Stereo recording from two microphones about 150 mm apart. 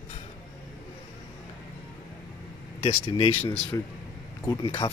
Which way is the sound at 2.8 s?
35° left (ahead or behind).